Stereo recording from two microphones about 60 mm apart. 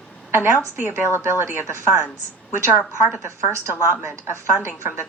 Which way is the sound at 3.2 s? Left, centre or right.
Right.